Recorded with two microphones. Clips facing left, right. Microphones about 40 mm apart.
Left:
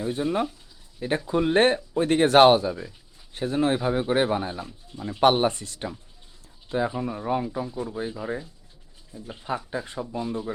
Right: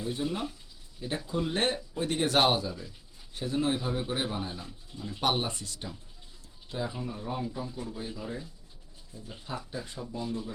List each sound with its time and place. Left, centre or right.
0.0 s speech: left
9.3 s speech: left